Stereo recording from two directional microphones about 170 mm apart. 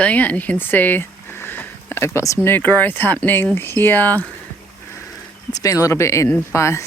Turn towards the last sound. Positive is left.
turn(degrees=15)  # may be behind; listen again after turning